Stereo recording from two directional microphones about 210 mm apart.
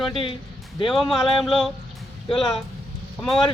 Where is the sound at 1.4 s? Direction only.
Centre (ahead or behind).